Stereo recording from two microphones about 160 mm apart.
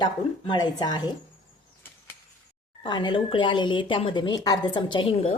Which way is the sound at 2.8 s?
30° left (ahead or behind).